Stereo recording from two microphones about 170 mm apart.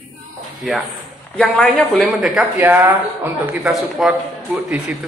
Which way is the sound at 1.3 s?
5° left (ahead or behind).